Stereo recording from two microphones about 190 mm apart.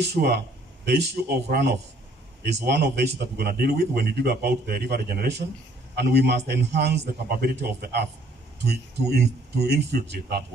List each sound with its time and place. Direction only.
0.0 s a man's voice: 60° right (ahead or behind)